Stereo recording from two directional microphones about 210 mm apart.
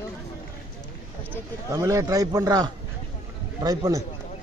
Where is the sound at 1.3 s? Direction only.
15° right (ahead or behind).